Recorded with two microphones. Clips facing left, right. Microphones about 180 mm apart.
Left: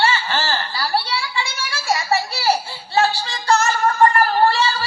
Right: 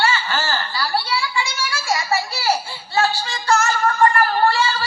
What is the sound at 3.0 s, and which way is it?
Music, 35° left (ahead or behind).